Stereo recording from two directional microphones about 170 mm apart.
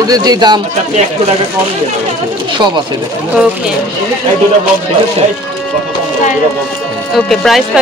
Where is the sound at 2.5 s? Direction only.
25° right (ahead or behind).